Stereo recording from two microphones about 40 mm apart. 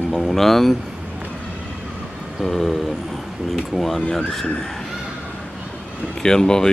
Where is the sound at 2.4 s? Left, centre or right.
Centre.